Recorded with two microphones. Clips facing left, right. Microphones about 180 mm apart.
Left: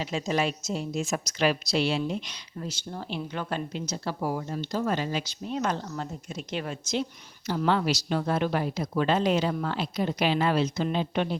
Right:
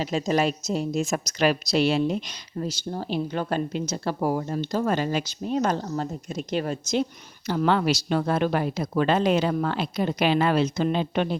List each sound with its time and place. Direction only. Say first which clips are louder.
0.0 s speech: right 4 dB; 40° right (ahead or behind)
7.4 s speech: right 3 dB; 65° right (ahead or behind)